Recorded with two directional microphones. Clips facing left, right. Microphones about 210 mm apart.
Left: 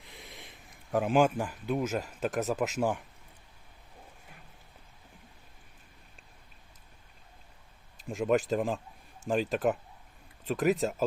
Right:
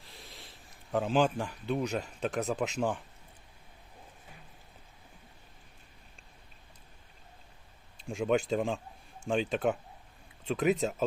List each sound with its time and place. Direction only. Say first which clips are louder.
0.0 s a sound: left 2 dB; 15° left (ahead or behind)
0.9 s speech: left 2 dB; 10° left (ahead or behind)
8.0 s speech: left 1 dB; centre (ahead or behind)